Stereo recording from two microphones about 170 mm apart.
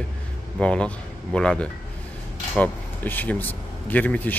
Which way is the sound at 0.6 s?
5° left (ahead or behind).